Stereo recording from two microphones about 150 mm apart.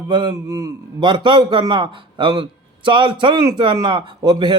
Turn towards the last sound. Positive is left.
turn(degrees=-30)  # may be behind; listen again after turning